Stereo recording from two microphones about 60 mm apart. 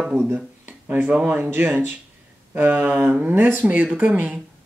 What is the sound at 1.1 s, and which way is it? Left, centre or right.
Speech, right.